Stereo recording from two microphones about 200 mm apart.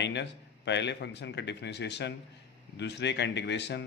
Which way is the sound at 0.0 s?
60° left (ahead or behind).